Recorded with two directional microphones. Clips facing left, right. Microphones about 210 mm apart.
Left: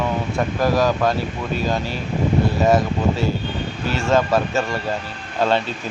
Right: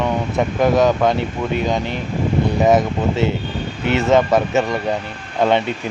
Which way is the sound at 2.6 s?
20° right (ahead or behind).